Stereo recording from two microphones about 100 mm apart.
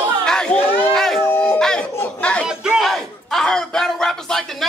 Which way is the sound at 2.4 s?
5° right (ahead or behind).